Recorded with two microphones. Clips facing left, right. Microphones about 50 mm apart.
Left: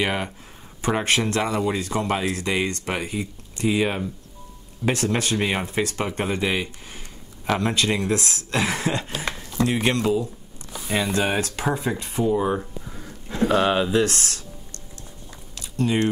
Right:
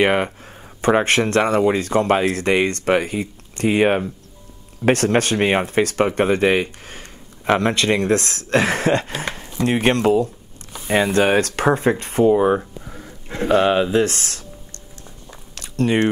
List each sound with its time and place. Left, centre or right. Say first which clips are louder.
0.0 s speech: right 7 dB; right
9.1 s a sound: right 2 dB; right
9.7 s speech: right 6 dB; right
13.3 s a sound: right 3 dB; right
13.6 s speech: right 6 dB; centre
13.9 s speech: right 3 dB; right
15.5 s biting: right 4 dB; right